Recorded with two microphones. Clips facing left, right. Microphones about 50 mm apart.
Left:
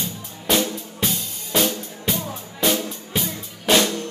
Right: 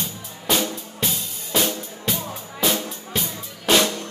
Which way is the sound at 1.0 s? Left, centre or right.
Centre.